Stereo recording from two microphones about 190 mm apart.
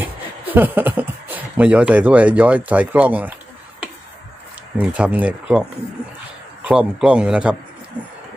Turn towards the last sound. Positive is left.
turn(degrees=-5)  # may be behind; listen again after turning